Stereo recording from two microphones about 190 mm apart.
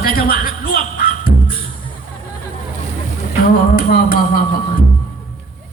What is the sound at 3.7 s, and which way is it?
Speech, 50° left (ahead or behind).